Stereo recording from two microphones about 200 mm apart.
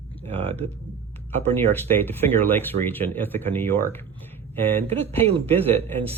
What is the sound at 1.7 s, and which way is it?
Speech, 10° left (ahead or behind).